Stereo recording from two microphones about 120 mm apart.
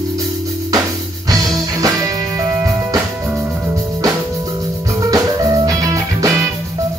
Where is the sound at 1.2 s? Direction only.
30° right (ahead or behind).